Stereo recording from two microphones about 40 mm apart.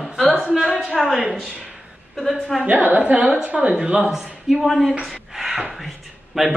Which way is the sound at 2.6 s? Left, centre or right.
Right.